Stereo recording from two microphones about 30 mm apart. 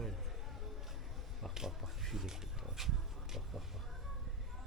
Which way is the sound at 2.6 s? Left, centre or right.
Centre.